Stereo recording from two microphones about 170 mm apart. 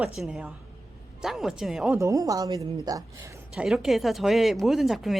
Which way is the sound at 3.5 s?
Centre (ahead or behind).